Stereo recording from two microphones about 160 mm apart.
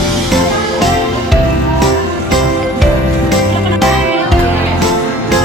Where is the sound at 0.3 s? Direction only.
Centre (ahead or behind).